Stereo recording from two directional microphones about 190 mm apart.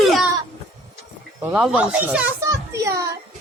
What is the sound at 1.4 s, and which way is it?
Speech, 10° right (ahead or behind).